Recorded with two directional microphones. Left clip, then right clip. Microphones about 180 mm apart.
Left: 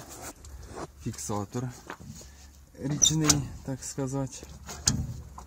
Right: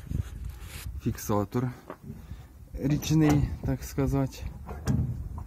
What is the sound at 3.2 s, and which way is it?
Speech, 10° right (ahead or behind).